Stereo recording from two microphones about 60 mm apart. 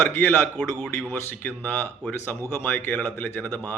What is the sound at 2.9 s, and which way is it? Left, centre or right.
Speech, left.